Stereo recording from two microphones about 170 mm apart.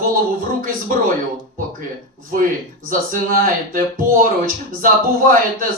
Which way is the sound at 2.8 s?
55° right (ahead or behind).